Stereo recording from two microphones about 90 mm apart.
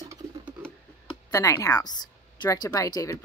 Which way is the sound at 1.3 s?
40° left (ahead or behind).